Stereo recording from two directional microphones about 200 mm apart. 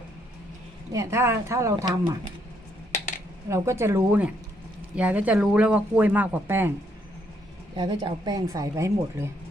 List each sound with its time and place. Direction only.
0.9 s speech: 15° right (ahead or behind)
3.5 s speech: 15° right (ahead or behind)
7.8 s speech: 25° right (ahead or behind)